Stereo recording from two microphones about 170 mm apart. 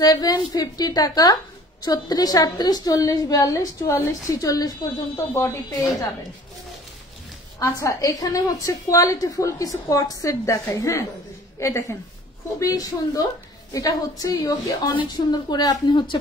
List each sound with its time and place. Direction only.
0.0 s a woman's voice: 20° left (ahead or behind)
7.5 s a woman's voice: 20° left (ahead or behind)